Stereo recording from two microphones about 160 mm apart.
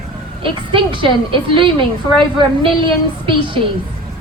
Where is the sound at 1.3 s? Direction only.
30° right (ahead or behind).